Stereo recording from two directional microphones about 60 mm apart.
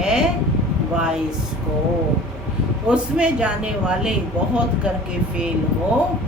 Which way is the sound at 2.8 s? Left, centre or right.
Centre.